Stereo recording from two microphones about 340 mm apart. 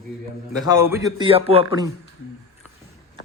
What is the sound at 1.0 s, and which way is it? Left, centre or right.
Speech, centre.